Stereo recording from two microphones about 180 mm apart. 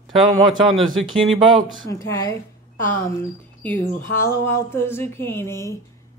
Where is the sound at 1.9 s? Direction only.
15° left (ahead or behind).